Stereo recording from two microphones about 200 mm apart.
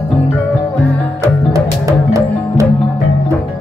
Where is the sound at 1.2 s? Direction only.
15° right (ahead or behind).